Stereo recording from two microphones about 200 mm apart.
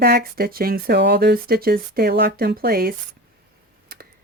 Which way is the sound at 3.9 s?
45° right (ahead or behind).